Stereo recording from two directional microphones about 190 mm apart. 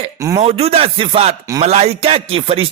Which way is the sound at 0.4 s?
35° right (ahead or behind).